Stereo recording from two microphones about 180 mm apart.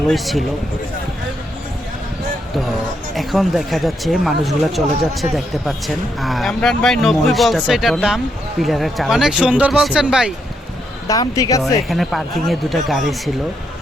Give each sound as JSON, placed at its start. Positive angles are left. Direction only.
{"t": 0.1, "sound": "speech", "side_deg": 0}
{"t": 3.2, "sound": "speech", "side_deg": 0}
{"t": 11.1, "sound": "speech", "side_deg": 20}
{"t": 11.9, "sound": "speech", "side_deg": 0}